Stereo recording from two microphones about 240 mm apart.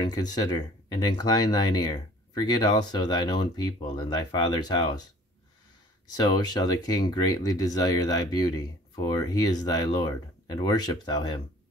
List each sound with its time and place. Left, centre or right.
0.0 s speech: centre
6.1 s speech: centre